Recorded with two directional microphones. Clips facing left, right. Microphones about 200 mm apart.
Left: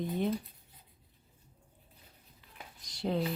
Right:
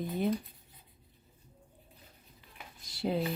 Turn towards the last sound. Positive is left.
turn(degrees=-5)  # may be behind; listen again after turning